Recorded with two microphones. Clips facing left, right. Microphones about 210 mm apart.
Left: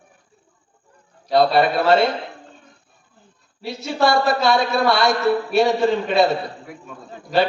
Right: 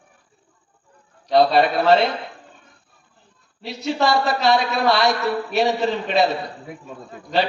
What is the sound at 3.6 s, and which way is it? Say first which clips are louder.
A man's voice: left 1 dB; 20° right (ahead or behind).